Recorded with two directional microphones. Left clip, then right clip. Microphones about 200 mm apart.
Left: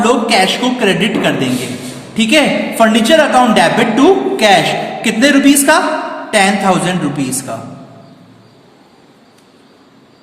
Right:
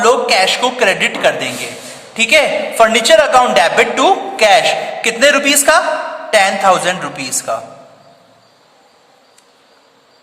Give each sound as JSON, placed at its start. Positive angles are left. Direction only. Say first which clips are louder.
{"t": 0.0, "sound": "a woman's voice", "louder": "even", "side_deg": -45}